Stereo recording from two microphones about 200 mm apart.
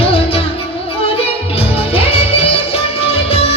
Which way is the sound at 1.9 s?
30° left (ahead or behind).